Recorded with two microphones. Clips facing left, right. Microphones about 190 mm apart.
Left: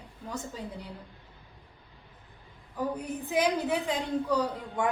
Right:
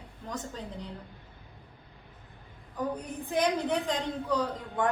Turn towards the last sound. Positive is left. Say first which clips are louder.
# even
turn(degrees=10)  # may be behind; listen again after turning